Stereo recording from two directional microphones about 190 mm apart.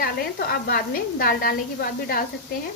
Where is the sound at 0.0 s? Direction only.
50° left (ahead or behind).